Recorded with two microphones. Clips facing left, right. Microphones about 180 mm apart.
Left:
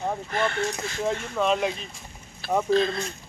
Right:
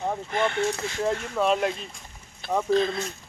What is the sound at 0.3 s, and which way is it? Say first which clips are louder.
Speech: right 3 dB; 15° right (ahead or behind).